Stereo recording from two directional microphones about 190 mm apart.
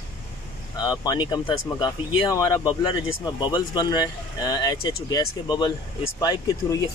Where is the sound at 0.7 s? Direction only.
20° left (ahead or behind).